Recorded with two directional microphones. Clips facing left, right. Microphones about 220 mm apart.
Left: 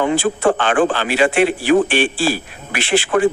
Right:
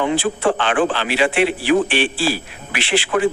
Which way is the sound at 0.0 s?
45° left (ahead or behind).